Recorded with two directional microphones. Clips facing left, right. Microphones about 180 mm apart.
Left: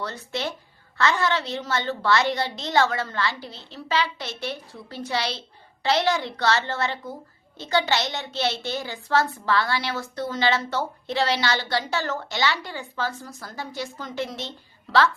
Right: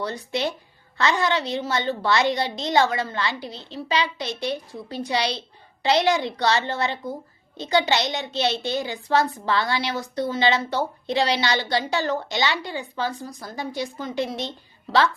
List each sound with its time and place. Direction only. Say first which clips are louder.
0.0 s a woman's voice: right 4 dB; 15° right (ahead or behind)